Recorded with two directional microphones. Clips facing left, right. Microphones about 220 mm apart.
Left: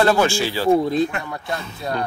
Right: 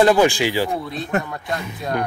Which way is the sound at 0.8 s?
40° left (ahead or behind).